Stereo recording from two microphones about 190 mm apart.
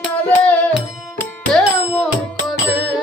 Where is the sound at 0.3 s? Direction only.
10° left (ahead or behind).